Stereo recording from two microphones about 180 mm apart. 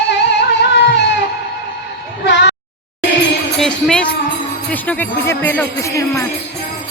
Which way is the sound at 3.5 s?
5° left (ahead or behind).